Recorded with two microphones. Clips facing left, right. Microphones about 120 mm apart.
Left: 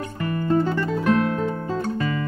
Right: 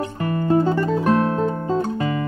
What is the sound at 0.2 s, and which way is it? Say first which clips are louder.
Music: right 2 dB; 30° right (ahead or behind).